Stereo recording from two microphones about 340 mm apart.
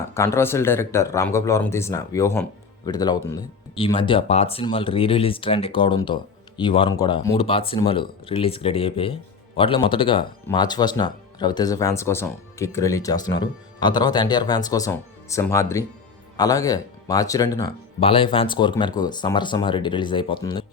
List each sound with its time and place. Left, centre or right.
0.1 s speech: centre